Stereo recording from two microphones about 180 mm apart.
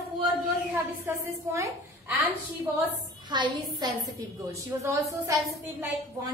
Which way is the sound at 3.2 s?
25° right (ahead or behind).